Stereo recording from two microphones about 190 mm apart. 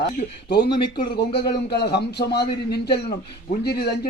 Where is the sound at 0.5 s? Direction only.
60° left (ahead or behind).